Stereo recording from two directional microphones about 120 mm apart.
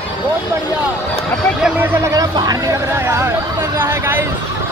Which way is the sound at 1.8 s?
25° right (ahead or behind).